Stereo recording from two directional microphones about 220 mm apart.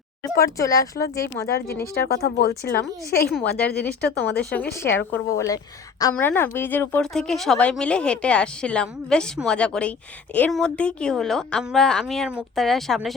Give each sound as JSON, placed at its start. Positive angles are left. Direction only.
{"t": 0.3, "sound": "speech", "side_deg": 15}
{"t": 1.5, "sound": "a woman's voice", "side_deg": 45}
{"t": 3.3, "sound": "speech", "side_deg": 5}